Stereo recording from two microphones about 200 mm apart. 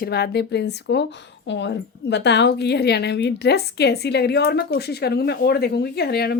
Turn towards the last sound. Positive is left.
turn(degrees=50)  # may be behind; listen again after turning